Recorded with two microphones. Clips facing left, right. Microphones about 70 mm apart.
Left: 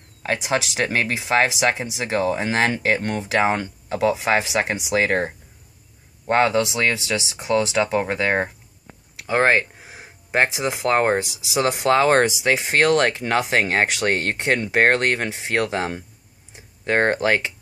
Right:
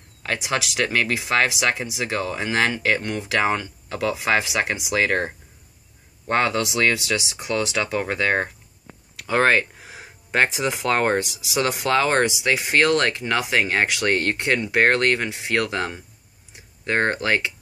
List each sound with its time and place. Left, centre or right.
0.2 s speech: left
6.3 s speech: left
9.2 s speech: centre; by 17.5 s left